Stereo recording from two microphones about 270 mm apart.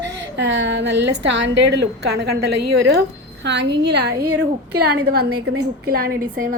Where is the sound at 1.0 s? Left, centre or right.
Right.